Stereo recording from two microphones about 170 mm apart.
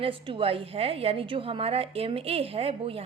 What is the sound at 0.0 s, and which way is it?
A woman's voice, 30° right (ahead or behind).